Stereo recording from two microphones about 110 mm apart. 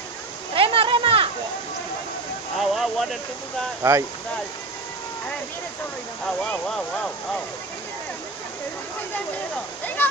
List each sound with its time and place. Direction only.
0.6 s a sound: 55° right (ahead or behind)
2.6 s speech: centre (ahead or behind)
3.8 s speech: 20° right (ahead or behind)